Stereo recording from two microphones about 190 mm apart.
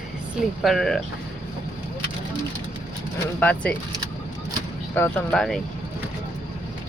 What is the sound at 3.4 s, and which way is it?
Speech, 5° left (ahead or behind).